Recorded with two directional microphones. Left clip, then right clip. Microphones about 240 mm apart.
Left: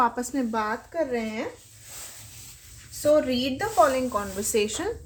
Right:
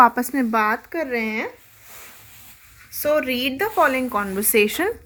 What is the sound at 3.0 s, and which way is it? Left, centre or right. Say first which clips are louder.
A woman's voice: right 1 dB; right.